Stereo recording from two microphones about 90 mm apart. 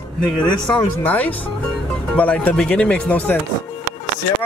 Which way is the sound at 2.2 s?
20° left (ahead or behind).